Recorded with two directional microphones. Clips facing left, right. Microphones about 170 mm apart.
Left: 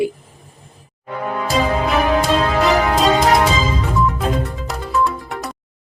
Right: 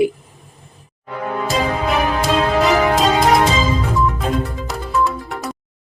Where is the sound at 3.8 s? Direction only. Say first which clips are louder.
Even; centre (ahead or behind).